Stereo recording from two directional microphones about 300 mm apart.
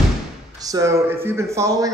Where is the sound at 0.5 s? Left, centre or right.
Centre.